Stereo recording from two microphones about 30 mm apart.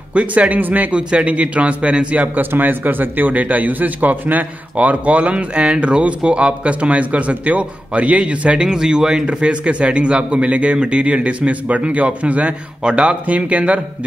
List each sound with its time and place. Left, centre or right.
0.1 s speech: right
0.9 s speech: right
2.3 s a man's voice: right
8.6 s speech: right
9.2 s a man's voice: right
12.8 s a man's voice: right
13.4 s speech: right